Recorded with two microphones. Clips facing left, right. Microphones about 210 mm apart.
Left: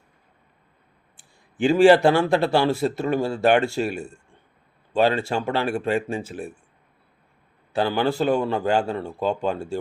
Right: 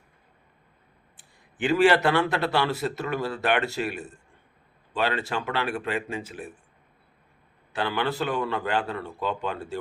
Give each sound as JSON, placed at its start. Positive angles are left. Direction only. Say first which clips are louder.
{"t": 1.6, "sound": "speech", "louder": "left 6 dB", "side_deg": 30}
{"t": 8.0, "sound": "speech", "louder": "left 6 dB", "side_deg": 35}
{"t": 8.9, "sound": "speech", "louder": "left 5 dB", "side_deg": 30}
{"t": 9.3, "sound": "speech", "louder": "left 7 dB", "side_deg": 40}